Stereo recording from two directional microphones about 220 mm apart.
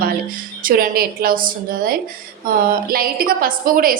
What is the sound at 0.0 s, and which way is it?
A woman's voice, 40° right (ahead or behind).